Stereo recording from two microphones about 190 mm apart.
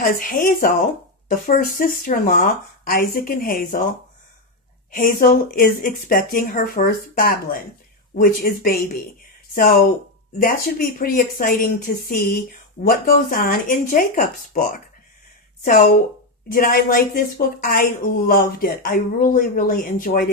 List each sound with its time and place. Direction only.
0.0 s speech: 45° left (ahead or behind)
4.9 s speech: 45° left (ahead or behind)